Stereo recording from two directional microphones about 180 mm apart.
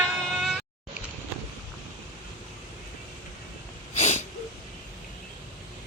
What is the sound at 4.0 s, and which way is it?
Wheeze, 35° left (ahead or behind).